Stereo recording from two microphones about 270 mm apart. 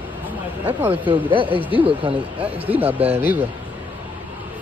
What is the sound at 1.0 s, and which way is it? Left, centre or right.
Speech, centre.